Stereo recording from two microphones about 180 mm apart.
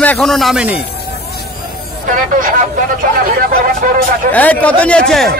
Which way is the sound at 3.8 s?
45° right (ahead or behind).